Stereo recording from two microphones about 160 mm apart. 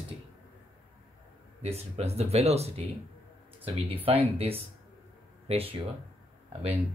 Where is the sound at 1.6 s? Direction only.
40° right (ahead or behind).